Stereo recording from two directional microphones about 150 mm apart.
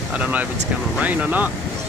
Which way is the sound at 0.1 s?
10° right (ahead or behind).